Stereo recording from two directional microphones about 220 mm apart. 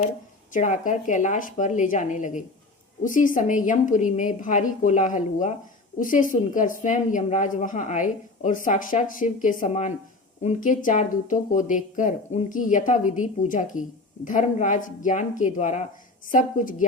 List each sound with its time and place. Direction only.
0.5 s a woman's voice: 35° left (ahead or behind)